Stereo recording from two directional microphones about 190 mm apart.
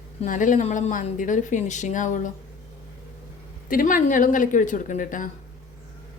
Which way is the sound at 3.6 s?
45° left (ahead or behind).